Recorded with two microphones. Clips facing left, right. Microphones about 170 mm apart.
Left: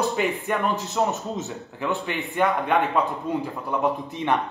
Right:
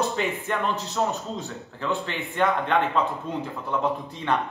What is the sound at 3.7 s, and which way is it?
Speech, 15° left (ahead or behind).